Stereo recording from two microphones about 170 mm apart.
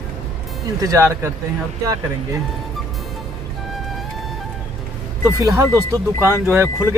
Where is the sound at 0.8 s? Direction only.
15° right (ahead or behind).